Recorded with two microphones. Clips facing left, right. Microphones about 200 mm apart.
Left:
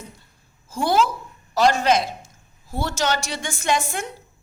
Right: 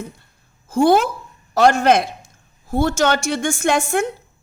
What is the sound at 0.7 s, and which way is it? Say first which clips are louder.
A woman's voice: right 6 dB; 55° right (ahead or behind).